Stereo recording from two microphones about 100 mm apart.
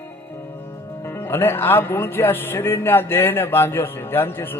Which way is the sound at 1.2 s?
25° left (ahead or behind).